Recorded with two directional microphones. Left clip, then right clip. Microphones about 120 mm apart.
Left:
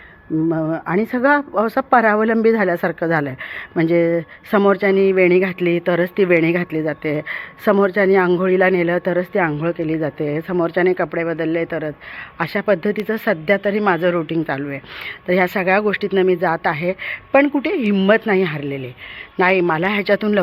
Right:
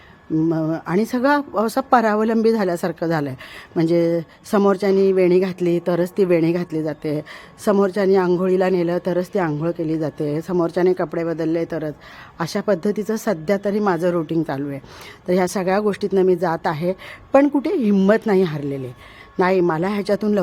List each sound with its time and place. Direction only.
0.5 s speech: 20° right (ahead or behind)
14.3 s speech: 35° right (ahead or behind)
15.3 s speech: 20° right (ahead or behind)
15.9 s speech: 30° right (ahead or behind)